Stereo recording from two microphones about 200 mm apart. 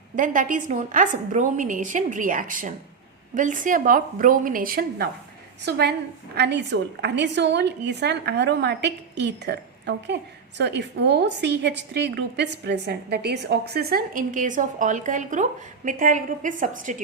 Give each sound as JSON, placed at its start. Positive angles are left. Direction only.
{"t": 0.2, "sound": "a woman's voice", "side_deg": -40}
{"t": 5.6, "sound": "a woman's voice", "side_deg": -55}